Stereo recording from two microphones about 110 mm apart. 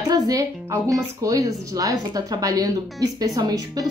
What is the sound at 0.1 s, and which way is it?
Speech, 30° right (ahead or behind).